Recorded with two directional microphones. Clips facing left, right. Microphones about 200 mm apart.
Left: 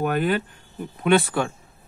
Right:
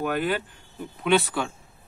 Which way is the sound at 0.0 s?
50° left (ahead or behind).